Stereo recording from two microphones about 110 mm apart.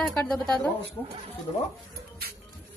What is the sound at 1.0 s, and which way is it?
Speech, 20° left (ahead or behind).